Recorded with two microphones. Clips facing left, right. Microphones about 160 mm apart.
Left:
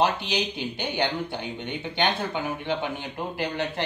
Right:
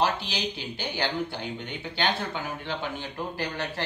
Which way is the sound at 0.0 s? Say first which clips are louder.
Left 3 dB; 20° left (ahead or behind).